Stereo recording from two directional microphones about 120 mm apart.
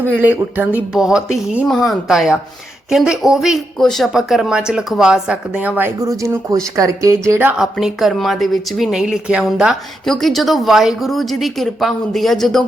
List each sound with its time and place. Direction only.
0.2 s a woman's voice: 15° right (ahead or behind)
6.0 s speech: 30° right (ahead or behind)
7.6 s a woman's voice: 5° right (ahead or behind)